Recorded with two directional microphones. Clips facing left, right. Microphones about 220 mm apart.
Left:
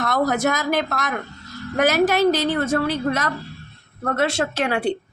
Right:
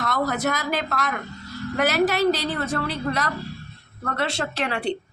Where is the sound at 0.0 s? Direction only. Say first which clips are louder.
Left 4 dB; 50° left (ahead or behind).